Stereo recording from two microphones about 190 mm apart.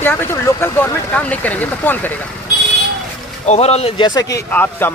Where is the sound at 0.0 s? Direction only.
10° left (ahead or behind).